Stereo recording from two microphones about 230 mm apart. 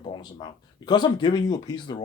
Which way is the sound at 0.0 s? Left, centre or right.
Centre.